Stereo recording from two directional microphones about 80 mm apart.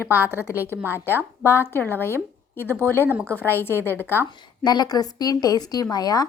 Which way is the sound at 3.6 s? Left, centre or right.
Left.